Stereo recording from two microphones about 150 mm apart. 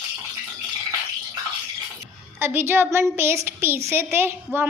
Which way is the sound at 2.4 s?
15° right (ahead or behind).